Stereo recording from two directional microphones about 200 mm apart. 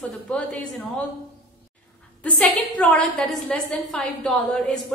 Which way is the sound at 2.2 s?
10° left (ahead or behind).